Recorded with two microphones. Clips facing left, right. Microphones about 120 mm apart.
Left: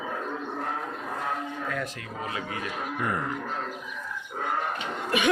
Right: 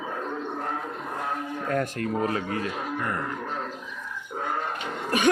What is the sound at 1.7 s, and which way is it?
Speech, 50° right (ahead or behind).